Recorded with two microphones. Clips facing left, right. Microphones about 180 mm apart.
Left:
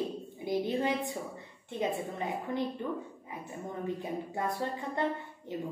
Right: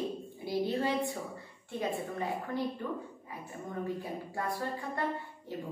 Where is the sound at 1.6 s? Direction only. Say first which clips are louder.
Left 2 dB; 20° left (ahead or behind).